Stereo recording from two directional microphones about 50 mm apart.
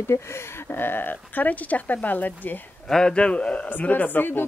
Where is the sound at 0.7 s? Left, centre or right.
Left.